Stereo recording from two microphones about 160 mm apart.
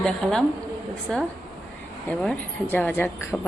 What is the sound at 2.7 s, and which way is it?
Speech, 10° left (ahead or behind).